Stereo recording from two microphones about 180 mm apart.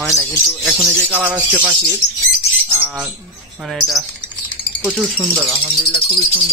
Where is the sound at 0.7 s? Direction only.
Centre (ahead or behind).